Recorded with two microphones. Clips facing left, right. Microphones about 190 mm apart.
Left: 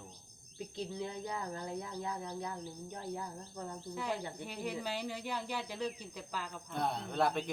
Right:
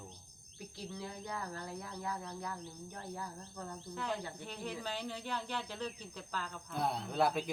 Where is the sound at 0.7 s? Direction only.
20° left (ahead or behind).